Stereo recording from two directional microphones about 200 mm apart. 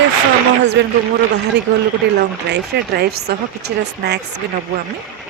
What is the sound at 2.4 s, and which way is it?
Speech, 55° right (ahead or behind).